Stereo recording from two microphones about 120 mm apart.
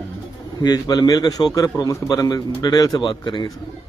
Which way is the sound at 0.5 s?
35° left (ahead or behind).